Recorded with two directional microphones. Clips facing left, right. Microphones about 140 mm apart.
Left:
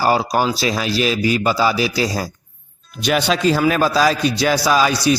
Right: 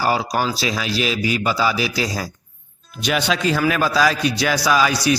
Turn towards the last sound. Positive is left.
turn(degrees=25)  # may be behind; listen again after turning